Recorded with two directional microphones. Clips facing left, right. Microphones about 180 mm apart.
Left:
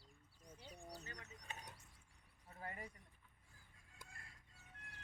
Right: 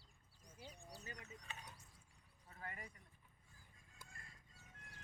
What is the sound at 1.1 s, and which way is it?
Speech, 40° left (ahead or behind).